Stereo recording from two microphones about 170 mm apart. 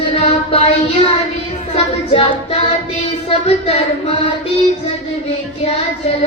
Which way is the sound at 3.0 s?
35° left (ahead or behind).